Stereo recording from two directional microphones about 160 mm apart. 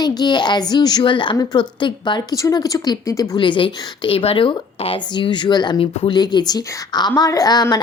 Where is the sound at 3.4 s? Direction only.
30° left (ahead or behind).